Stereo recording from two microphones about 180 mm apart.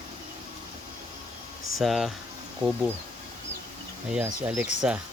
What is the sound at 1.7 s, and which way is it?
Speech, centre (ahead or behind).